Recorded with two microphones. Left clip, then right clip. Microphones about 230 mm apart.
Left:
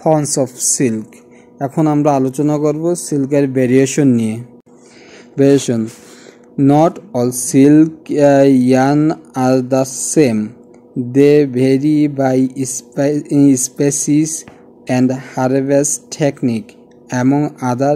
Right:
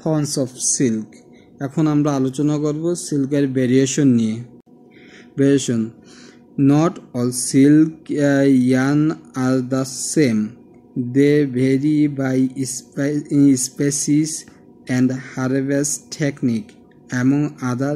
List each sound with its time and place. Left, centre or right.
0.0 s speech: centre